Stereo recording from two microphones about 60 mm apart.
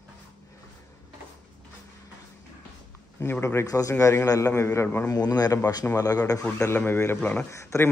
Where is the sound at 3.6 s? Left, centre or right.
Left.